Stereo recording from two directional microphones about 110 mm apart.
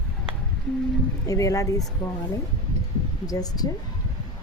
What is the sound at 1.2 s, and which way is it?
Speech, 30° left (ahead or behind).